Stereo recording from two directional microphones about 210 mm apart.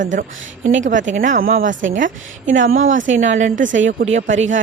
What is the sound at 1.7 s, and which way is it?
Speech, 65° right (ahead or behind).